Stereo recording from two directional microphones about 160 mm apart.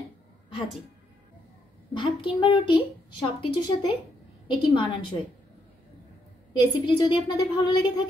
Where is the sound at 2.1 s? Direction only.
30° left (ahead or behind).